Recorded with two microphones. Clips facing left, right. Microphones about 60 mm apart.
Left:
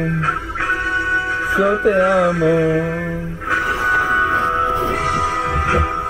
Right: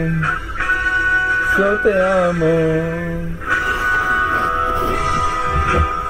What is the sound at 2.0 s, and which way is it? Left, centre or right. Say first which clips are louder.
Music: even; centre.